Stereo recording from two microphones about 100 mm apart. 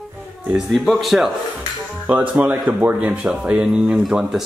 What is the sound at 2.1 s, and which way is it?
A man's voice, 15° right (ahead or behind).